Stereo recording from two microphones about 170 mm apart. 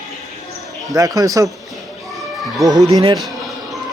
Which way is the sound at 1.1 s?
20° right (ahead or behind).